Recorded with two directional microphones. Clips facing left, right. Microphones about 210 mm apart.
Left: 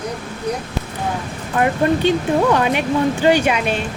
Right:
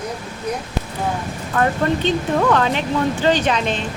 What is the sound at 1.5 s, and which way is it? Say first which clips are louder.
Speech: left 2 dB; 15° left (ahead or behind).